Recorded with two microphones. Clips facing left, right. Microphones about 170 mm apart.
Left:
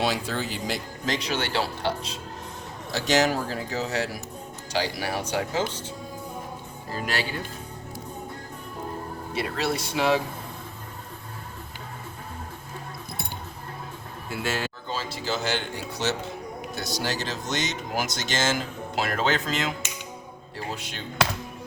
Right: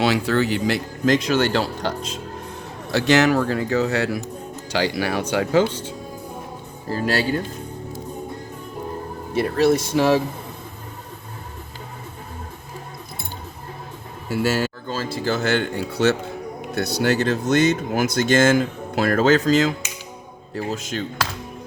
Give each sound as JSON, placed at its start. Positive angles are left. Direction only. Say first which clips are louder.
{"t": 0.0, "sound": "speech", "louder": "right 8 dB", "side_deg": -70}
{"t": 1.0, "sound": "speech", "louder": "right 10 dB", "side_deg": -50}
{"t": 2.9, "sound": "speech", "louder": "right 6 dB", "side_deg": -65}
{"t": 4.8, "sound": "speech", "louder": "right 6 dB", "side_deg": -75}
{"t": 6.9, "sound": "speech", "louder": "right 8 dB", "side_deg": -35}
{"t": 9.3, "sound": "speech", "louder": "right 10 dB", "side_deg": -45}
{"t": 14.9, "sound": "speech", "louder": "right 6 dB", "side_deg": -50}